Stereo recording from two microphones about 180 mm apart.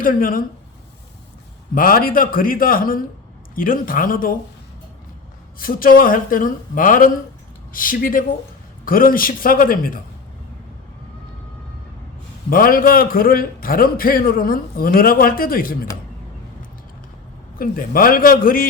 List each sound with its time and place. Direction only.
0.0 s a man's voice: 50° left (ahead or behind)
1.7 s a man's voice: 55° left (ahead or behind)
5.5 s a man's voice: 50° left (ahead or behind)
12.5 s a man's voice: 50° left (ahead or behind)
17.6 s a man's voice: 55° left (ahead or behind)